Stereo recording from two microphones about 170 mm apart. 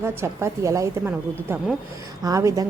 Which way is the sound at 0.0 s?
15° right (ahead or behind).